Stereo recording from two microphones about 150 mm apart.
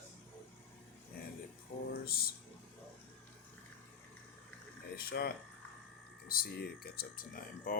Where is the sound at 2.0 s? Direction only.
90° left.